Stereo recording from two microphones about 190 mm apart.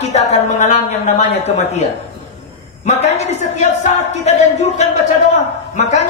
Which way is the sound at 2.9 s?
35° left (ahead or behind).